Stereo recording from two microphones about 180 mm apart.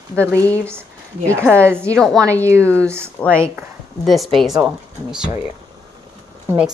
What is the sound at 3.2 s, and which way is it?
Speech, 10° left (ahead or behind).